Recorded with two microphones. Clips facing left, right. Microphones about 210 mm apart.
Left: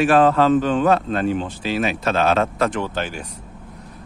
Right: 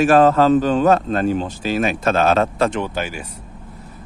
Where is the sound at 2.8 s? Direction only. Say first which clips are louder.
Right 1 dB; 10° right (ahead or behind).